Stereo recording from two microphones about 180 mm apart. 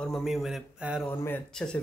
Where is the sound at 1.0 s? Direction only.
10° left (ahead or behind).